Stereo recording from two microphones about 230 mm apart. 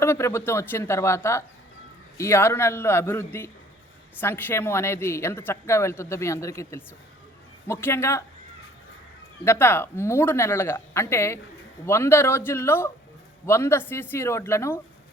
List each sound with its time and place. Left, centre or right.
0.0 s speech: centre
9.4 s speech: centre